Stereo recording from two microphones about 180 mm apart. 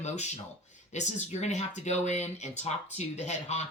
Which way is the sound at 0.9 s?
40° left (ahead or behind).